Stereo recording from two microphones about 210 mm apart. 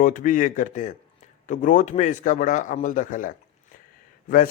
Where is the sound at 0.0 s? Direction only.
40° left (ahead or behind).